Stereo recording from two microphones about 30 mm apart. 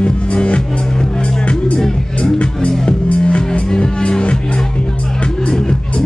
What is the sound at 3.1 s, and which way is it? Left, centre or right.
Music, left.